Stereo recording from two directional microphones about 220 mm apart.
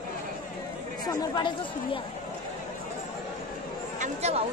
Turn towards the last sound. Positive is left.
turn(degrees=-30)  # may be behind; listen again after turning